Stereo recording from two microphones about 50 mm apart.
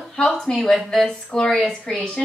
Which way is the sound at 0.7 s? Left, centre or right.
Centre.